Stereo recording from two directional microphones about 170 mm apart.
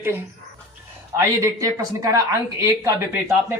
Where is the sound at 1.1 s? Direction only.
20° right (ahead or behind).